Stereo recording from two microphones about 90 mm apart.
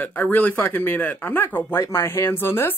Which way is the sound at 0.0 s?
20° left (ahead or behind).